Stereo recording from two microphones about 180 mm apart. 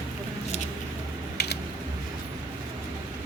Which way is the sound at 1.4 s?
65° left (ahead or behind).